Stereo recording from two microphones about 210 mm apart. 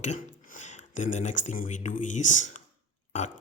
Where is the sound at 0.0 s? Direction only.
35° left (ahead or behind).